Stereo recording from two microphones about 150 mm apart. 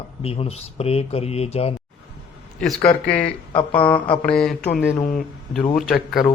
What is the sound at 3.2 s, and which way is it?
Speech, 35° left (ahead or behind).